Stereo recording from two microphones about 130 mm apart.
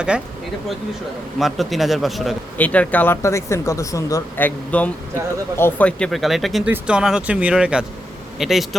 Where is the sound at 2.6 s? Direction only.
10° left (ahead or behind).